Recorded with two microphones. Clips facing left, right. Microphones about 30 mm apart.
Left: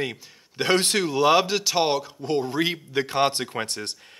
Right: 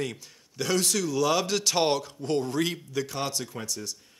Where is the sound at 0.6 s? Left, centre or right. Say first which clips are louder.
Left 5 dB; left.